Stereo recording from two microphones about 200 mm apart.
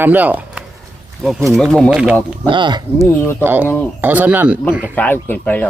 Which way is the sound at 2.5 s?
25° right (ahead or behind).